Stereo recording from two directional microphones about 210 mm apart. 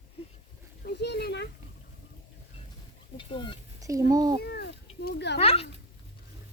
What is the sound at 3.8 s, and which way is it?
Speech, 15° right (ahead or behind).